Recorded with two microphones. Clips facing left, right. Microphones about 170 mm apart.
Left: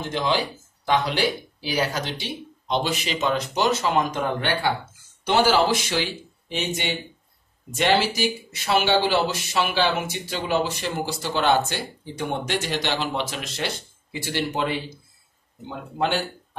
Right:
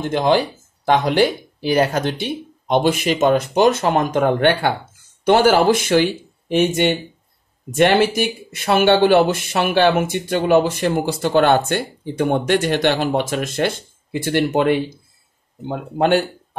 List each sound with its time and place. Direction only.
0.1 s speech: 55° right (ahead or behind)